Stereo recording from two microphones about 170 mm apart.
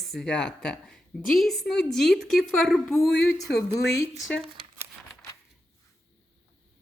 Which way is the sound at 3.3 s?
20° left (ahead or behind).